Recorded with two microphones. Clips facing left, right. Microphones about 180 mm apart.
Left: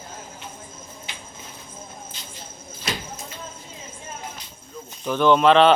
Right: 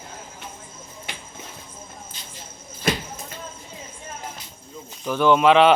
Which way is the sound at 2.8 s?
55° right (ahead or behind).